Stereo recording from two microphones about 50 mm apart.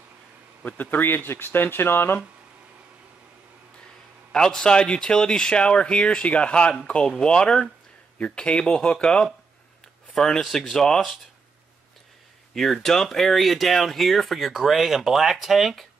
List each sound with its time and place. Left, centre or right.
0.7 s speech: left
4.3 s speech: centre
12.5 s speech: centre